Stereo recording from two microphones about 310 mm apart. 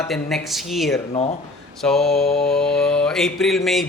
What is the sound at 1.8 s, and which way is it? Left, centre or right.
A man's voice, centre.